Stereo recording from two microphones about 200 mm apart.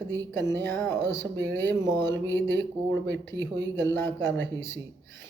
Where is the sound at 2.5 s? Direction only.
60° right (ahead or behind).